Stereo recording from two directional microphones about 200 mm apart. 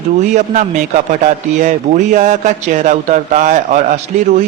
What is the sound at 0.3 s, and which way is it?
A man's voice, 35° right (ahead or behind).